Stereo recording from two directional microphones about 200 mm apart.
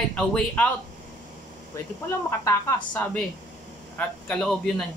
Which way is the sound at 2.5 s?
15° left (ahead or behind).